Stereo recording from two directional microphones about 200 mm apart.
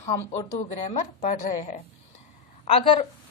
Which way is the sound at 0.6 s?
35° left (ahead or behind).